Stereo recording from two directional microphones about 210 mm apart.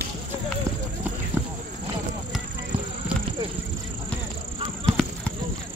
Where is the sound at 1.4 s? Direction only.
10° right (ahead or behind).